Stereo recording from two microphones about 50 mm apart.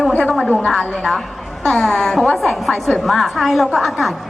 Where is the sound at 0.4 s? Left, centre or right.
Left.